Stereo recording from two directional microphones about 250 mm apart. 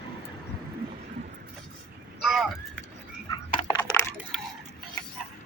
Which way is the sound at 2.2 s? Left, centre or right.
Centre.